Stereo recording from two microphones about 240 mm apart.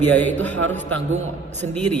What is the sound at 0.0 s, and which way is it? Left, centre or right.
A man's voice, centre.